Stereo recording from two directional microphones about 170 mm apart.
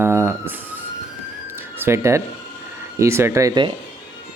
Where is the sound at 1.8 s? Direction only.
15° right (ahead or behind).